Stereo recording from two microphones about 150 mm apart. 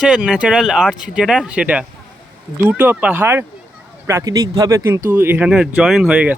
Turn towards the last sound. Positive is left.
turn(degrees=-10)  # may be behind; listen again after turning